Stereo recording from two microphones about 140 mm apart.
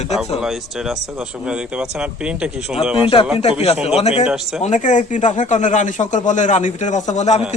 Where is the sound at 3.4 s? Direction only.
45° left (ahead or behind).